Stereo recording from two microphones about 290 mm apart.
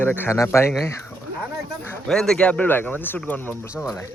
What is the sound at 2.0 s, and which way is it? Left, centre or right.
Speech, centre.